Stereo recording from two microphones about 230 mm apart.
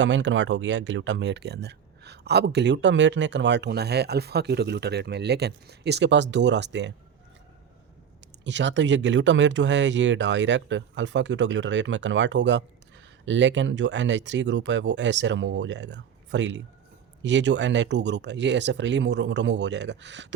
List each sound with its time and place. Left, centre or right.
0.0 s speech: right
8.4 s speech: right